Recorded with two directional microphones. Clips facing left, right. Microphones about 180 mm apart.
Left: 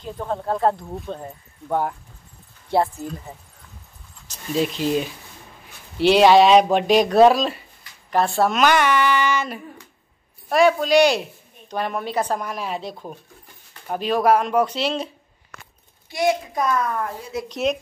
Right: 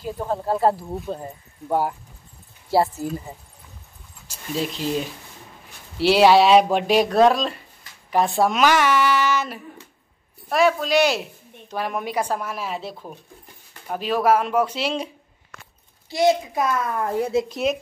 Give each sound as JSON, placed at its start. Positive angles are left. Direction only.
{"t": 0.0, "sound": "speech", "side_deg": -5}
{"t": 4.6, "sound": "speech", "side_deg": 0}
{"t": 8.1, "sound": "speech", "side_deg": -15}
{"t": 16.1, "sound": "a child's voice", "side_deg": -25}
{"t": 16.5, "sound": "speech", "side_deg": -5}